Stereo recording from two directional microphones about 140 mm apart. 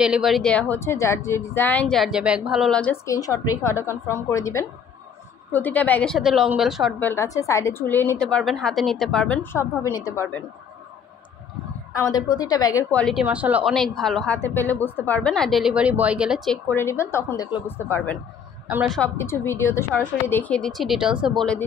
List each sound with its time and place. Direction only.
0.0 s a woman's voice: 5° right (ahead or behind)
3.1 s a woman's voice: 25° left (ahead or behind)
6.1 s a woman's voice: centre (ahead or behind)
7.0 s a woman's voice: 15° left (ahead or behind)
11.9 s a woman's voice: 25° left (ahead or behind)
12.9 s a woman's voice: 5° left (ahead or behind)
13.2 s speech: 10° right (ahead or behind)
13.7 s a woman's voice: centre (ahead or behind)
16.7 s a woman's voice: 20° left (ahead or behind)
19.1 s a woman's voice: 20° left (ahead or behind); by 21.3 s 5° right (ahead or behind)
21.4 s a woman's voice: 5° left (ahead or behind)